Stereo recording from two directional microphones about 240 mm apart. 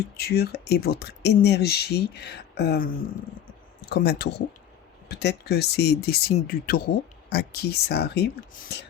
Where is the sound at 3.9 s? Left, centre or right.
Left.